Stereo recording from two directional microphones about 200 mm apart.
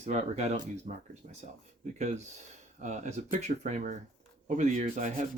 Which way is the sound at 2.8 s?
35° right (ahead or behind).